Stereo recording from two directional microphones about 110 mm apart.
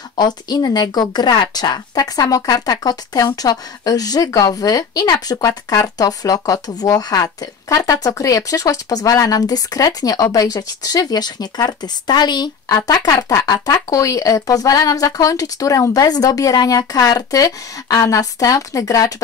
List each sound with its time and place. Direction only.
0.1 s speech: 40° left (ahead or behind)